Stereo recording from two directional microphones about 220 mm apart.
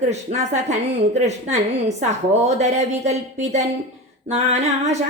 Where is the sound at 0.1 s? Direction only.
30° right (ahead or behind).